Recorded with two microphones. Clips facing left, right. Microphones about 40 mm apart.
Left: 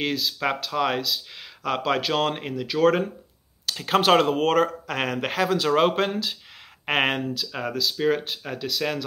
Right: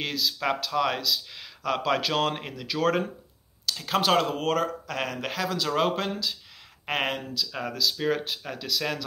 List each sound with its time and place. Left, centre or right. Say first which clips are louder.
0.0 s speech: left 3 dB; centre
3.6 s speech: left 4 dB; left
7.5 s speech: left 1 dB; centre